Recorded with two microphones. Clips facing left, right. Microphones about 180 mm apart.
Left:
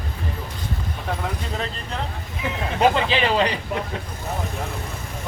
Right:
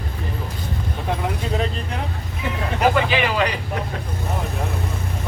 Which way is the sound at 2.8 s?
25° left (ahead or behind).